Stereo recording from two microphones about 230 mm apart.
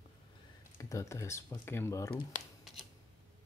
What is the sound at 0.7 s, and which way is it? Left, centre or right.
Speech, centre.